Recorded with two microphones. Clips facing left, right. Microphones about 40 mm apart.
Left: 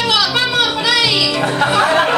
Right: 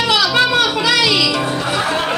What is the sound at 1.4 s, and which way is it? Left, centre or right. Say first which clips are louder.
Speech: left 5 dB; left.